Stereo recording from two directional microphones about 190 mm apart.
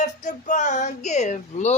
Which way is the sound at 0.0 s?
40° left (ahead or behind).